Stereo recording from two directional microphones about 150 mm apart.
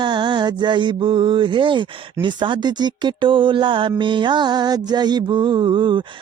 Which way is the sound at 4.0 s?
30° right (ahead or behind).